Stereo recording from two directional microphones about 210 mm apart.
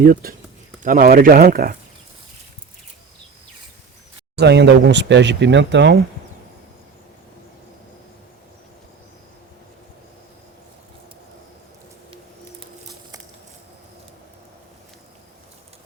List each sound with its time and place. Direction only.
0.0 s speech: 45° right (ahead or behind)
4.4 s speech: 55° right (ahead or behind)